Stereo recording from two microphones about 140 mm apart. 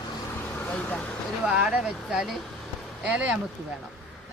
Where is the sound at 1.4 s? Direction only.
5° right (ahead or behind).